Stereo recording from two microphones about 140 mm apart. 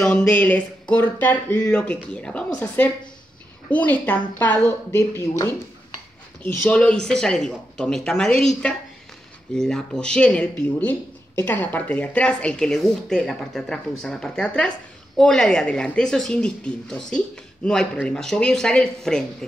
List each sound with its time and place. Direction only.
0.0 s speech: 5° left (ahead or behind)